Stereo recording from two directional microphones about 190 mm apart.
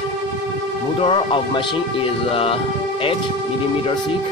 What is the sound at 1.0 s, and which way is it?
Speech, 30° left (ahead or behind).